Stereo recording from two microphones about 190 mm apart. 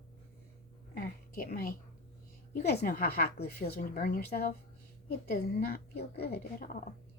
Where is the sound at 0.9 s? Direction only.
50° left (ahead or behind).